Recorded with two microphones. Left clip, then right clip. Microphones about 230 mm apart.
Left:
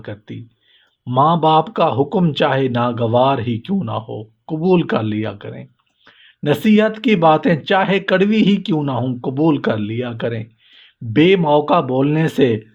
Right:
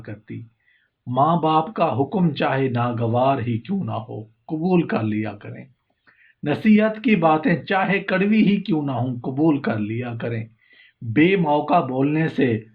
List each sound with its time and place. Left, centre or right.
0.0 s speech: left